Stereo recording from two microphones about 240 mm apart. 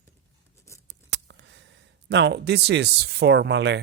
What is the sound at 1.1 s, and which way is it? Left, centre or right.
Speech, right.